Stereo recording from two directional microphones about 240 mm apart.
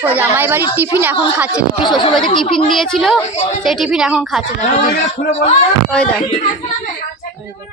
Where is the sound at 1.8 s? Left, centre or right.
Centre.